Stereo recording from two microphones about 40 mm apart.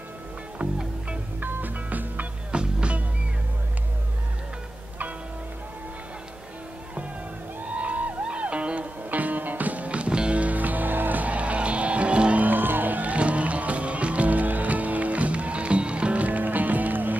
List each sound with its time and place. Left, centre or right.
1.4 s music: right
2.5 s music: right
7.7 s music: right
10.4 s music: right
12.4 s music: right